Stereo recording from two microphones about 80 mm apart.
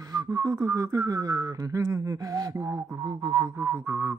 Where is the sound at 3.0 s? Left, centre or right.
Right.